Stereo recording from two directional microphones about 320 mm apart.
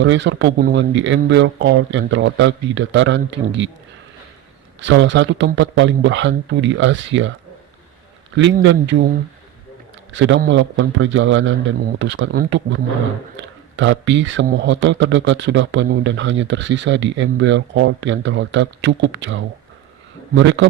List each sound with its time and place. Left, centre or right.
0.0 s speech: right
4.8 s speech: right
8.5 s speech: right
10.1 s speech: right